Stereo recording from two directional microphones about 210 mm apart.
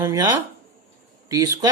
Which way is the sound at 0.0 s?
15° right (ahead or behind).